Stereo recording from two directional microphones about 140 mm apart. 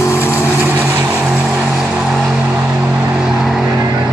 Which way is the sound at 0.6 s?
15° right (ahead or behind).